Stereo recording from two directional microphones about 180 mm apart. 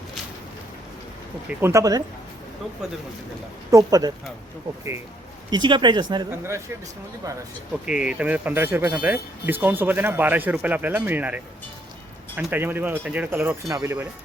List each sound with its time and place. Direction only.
1.5 s speech: 15° right (ahead or behind)
3.7 s speech: 20° right (ahead or behind)
5.5 s speech: 25° right (ahead or behind)
7.7 s speech: 5° right (ahead or behind)
12.4 s speech: 10° right (ahead or behind)